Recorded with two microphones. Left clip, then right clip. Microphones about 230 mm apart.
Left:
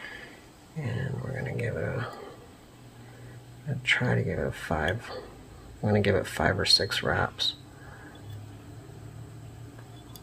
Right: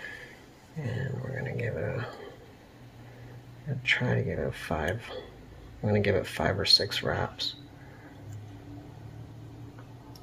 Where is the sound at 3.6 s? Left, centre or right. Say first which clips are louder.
Left 1 dB; centre.